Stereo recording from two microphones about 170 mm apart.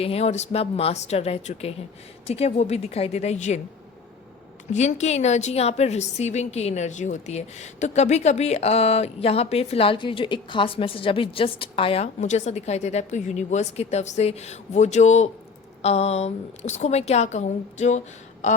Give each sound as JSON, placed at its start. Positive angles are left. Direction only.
{"t": 0.0, "sound": "a woman's voice", "side_deg": 35}
{"t": 4.7, "sound": "a woman's voice", "side_deg": 45}